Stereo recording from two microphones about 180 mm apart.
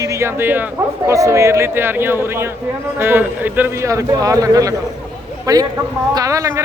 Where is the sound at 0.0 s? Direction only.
15° right (ahead or behind).